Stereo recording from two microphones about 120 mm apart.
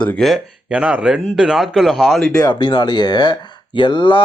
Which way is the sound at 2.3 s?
35° left (ahead or behind).